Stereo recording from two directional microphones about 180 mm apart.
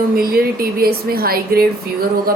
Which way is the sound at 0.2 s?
55° right (ahead or behind).